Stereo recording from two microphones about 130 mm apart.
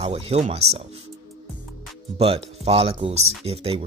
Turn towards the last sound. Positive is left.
turn(degrees=-50)  # may be behind; listen again after turning